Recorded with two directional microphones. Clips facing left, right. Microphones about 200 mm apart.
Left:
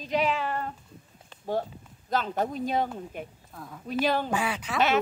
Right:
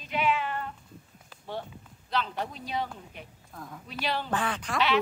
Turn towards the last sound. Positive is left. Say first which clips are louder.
# left 2 dB
turn(degrees=5)  # may be behind; listen again after turning